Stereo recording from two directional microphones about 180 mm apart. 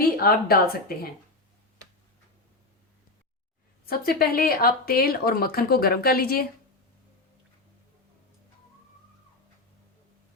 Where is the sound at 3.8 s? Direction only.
55° left (ahead or behind).